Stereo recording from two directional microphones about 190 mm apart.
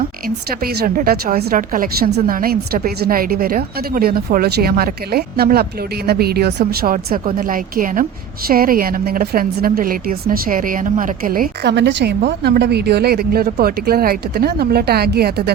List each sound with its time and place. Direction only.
0.6 s a woman's voice: 55° right (ahead or behind)